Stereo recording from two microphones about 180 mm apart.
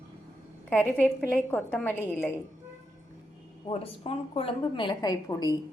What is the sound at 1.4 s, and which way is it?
Speech, 10° left (ahead or behind).